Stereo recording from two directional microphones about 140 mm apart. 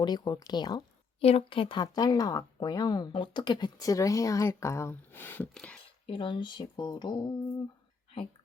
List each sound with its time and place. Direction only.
0.0 s speech: 30° left (ahead or behind)
1.2 s speech: 45° left (ahead or behind); by 5.8 s 5° left (ahead or behind)
6.1 s speech: 40° left (ahead or behind)